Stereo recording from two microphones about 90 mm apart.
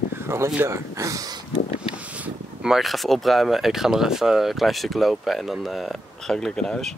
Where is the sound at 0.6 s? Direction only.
35° right (ahead or behind).